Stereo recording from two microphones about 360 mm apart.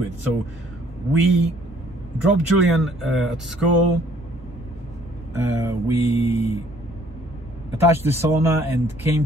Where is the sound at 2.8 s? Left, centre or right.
Centre.